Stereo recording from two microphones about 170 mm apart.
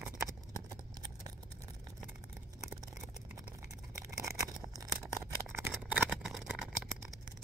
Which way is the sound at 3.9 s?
20° right (ahead or behind).